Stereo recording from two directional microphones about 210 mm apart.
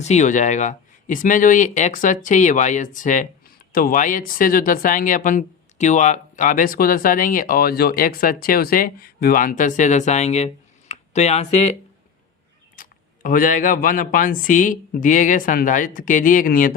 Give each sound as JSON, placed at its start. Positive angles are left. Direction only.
{"t": 0.0, "sound": "speech", "side_deg": 35}
{"t": 12.7, "sound": "speech", "side_deg": 40}